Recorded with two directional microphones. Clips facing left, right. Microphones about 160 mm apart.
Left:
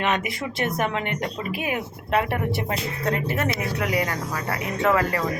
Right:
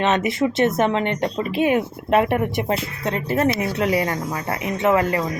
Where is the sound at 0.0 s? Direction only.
25° right (ahead or behind).